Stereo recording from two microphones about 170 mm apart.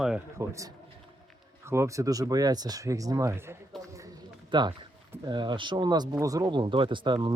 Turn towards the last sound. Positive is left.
turn(degrees=-25)  # may be behind; listen again after turning